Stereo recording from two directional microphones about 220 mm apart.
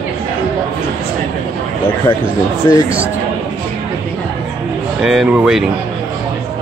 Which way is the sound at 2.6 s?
15° left (ahead or behind).